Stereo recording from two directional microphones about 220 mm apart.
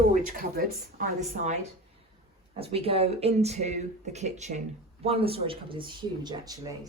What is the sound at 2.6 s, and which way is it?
Speech, 25° right (ahead or behind).